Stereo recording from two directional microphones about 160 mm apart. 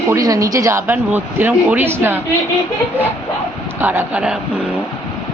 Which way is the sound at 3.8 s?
15° right (ahead or behind).